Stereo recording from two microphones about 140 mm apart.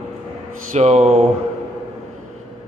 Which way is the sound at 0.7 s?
50° right (ahead or behind).